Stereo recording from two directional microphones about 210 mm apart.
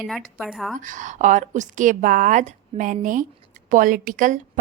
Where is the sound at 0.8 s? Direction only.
35° right (ahead or behind).